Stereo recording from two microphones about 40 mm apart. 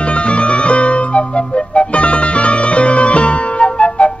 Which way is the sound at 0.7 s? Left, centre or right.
Left.